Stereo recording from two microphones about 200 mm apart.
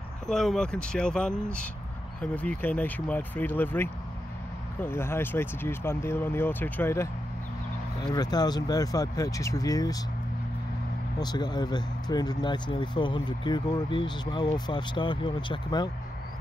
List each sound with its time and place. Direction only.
0.3 s speech: centre (ahead or behind); by 9.9 s 20° left (ahead or behind)
11.1 s speech: 20° left (ahead or behind)